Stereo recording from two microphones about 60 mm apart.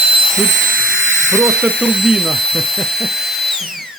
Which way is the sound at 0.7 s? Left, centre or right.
Right.